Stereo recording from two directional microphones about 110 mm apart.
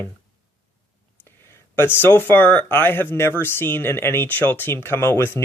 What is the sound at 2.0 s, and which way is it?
Speech, 20° left (ahead or behind).